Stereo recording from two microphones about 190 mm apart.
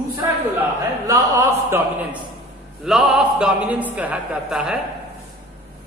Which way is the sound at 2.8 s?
Centre (ahead or behind).